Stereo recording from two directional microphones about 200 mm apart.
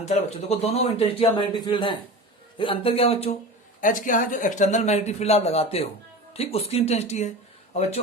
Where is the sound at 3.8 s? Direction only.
40° left (ahead or behind).